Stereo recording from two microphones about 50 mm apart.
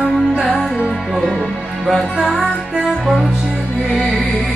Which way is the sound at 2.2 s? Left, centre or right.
Centre.